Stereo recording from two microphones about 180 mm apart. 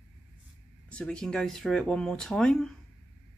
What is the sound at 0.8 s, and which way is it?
Speech, 5° left (ahead or behind).